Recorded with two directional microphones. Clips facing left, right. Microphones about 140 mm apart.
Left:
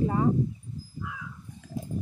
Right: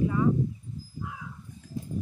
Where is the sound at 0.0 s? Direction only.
40° left (ahead or behind).